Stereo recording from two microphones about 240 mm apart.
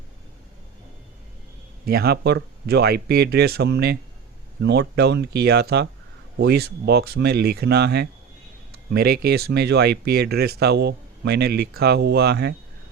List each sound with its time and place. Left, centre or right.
1.9 s speech: right